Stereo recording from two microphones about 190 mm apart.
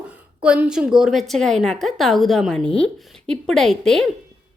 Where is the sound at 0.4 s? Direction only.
5° right (ahead or behind).